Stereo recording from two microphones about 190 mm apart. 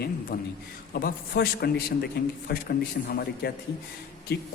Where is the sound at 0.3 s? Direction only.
50° left (ahead or behind).